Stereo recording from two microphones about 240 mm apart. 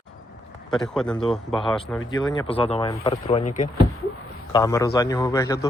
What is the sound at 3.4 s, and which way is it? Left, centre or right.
Speech, left.